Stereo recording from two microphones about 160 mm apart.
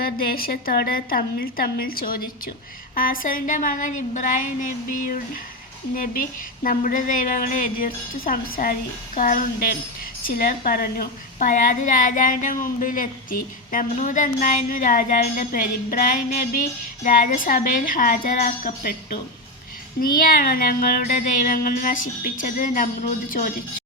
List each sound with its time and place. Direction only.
0.0 s a woman's voice: 70° left (ahead or behind)
20.0 s a woman's voice: 65° left (ahead or behind)